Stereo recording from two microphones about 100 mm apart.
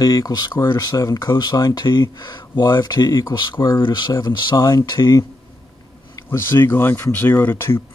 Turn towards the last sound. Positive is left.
turn(degrees=25)  # may be behind; listen again after turning